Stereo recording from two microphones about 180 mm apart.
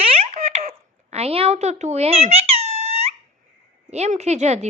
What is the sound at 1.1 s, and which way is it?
Squeak, 35° right (ahead or behind).